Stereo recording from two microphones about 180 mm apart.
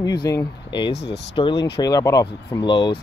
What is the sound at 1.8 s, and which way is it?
Speech, 20° left (ahead or behind).